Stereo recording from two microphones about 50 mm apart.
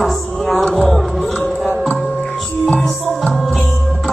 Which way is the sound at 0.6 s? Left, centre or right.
Centre.